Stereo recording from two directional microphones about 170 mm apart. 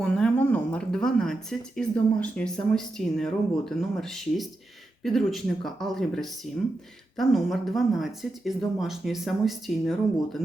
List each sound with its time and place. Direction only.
0.0 s speech: 5° left (ahead or behind)